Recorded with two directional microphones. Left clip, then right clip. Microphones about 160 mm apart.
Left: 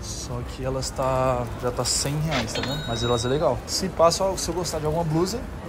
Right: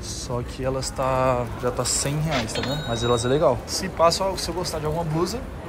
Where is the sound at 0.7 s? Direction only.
20° left (ahead or behind).